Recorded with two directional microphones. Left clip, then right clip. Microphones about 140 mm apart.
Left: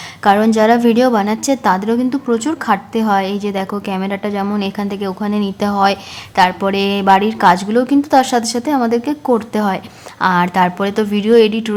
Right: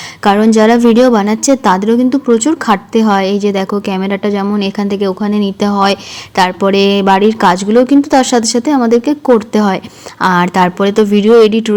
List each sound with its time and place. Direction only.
0.2 s a woman's voice: 30° right (ahead or behind)